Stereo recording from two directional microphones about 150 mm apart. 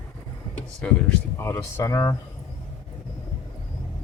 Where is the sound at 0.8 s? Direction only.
10° left (ahead or behind).